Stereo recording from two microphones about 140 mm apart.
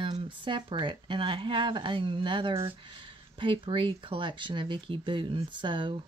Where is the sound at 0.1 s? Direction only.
35° right (ahead or behind).